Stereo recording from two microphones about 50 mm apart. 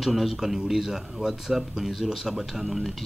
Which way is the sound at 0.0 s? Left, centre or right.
Centre.